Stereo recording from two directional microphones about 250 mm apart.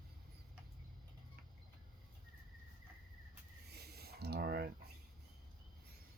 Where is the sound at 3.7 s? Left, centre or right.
Right.